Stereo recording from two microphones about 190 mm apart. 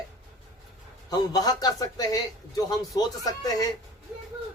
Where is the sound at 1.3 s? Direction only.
20° left (ahead or behind).